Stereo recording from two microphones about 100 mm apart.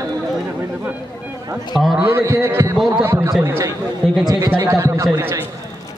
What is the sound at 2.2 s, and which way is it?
A man's voice, 25° right (ahead or behind).